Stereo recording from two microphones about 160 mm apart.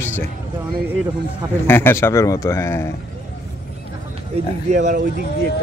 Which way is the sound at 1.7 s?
15° left (ahead or behind).